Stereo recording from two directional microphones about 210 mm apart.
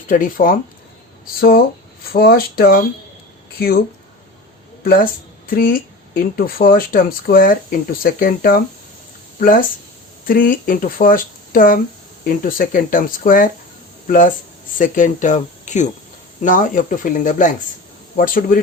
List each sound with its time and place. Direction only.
0.1 s speech: 40° left (ahead or behind)